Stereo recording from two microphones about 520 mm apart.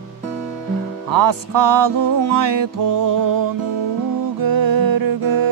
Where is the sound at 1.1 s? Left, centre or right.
Right.